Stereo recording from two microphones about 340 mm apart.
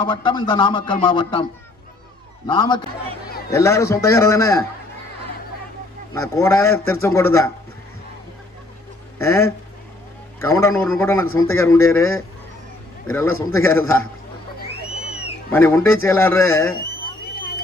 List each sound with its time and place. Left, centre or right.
0.0 s speech: centre
2.5 s speech: centre
6.1 s speech: centre
9.2 s speech: centre
14.7 s a sound: centre
15.5 s speech: centre
16.7 s a sound: left